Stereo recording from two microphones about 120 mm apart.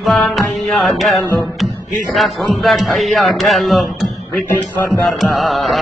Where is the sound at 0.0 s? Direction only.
Centre (ahead or behind).